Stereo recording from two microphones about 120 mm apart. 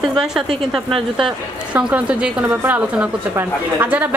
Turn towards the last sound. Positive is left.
turn(degrees=-15)  # may be behind; listen again after turning